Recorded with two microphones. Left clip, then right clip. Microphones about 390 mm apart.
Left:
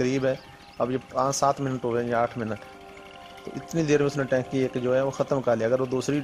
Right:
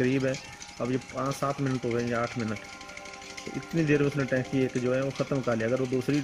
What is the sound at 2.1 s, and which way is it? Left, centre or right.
Speech, centre.